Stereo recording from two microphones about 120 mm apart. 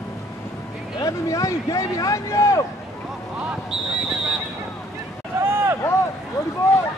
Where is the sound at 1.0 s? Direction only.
25° left (ahead or behind).